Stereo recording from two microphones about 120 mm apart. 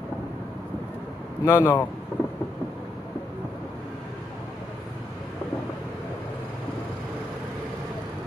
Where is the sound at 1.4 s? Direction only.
20° left (ahead or behind).